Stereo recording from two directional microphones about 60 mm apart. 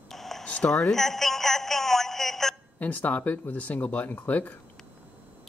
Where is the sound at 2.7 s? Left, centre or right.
Left.